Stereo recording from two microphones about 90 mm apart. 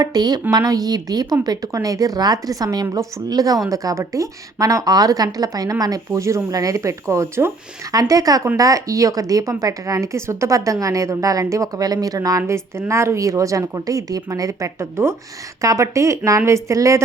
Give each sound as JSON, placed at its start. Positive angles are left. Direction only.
{"t": 0.0, "sound": "speech", "side_deg": -50}
{"t": 12.4, "sound": "a woman's voice", "side_deg": -30}